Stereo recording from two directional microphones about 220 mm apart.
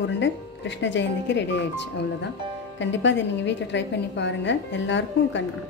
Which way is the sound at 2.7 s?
55° left (ahead or behind).